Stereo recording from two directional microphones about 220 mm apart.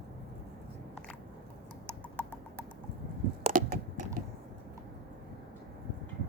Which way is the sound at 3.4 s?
35° right (ahead or behind).